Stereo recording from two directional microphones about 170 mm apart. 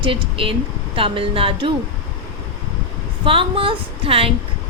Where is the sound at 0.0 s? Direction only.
30° right (ahead or behind).